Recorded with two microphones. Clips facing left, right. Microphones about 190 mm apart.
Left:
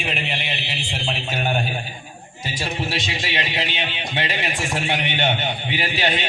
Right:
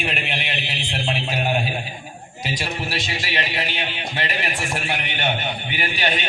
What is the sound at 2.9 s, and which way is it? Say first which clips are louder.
A man's voice: left 1 dB; 25° left (ahead or behind).